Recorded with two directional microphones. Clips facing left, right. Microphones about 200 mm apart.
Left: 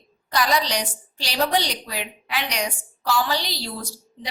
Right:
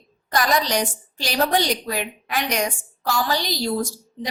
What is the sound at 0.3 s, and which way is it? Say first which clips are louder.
A woman's voice: right 1 dB; 50° right (ahead or behind).